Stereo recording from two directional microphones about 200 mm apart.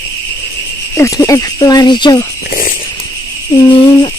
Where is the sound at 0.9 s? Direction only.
15° left (ahead or behind).